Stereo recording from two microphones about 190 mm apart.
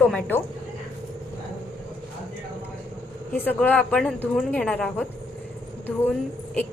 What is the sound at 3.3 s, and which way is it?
A woman's voice, 10° left (ahead or behind).